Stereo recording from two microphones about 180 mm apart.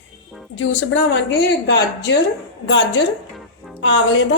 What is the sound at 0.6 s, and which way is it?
A woman's voice, 90° left.